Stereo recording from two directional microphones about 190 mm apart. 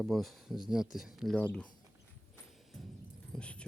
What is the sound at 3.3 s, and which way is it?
Keys jangling, 5° left (ahead or behind).